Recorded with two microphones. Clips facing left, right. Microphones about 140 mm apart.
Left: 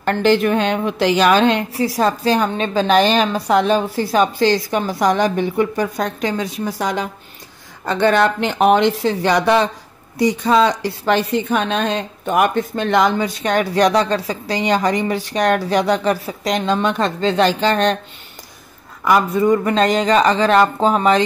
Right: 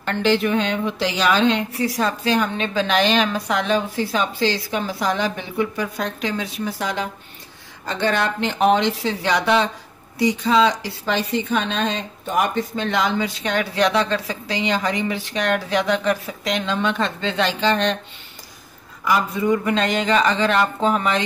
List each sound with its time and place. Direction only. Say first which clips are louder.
0.0 s a woman's voice: left 4 dB; 50° left (ahead or behind)
1.7 s a woman's voice: left 4 dB; 35° left (ahead or behind)
19.0 s speech: left 5 dB; 45° left (ahead or behind)